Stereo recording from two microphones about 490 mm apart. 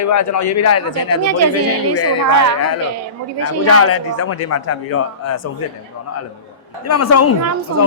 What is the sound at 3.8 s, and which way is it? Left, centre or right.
A man's voice, left.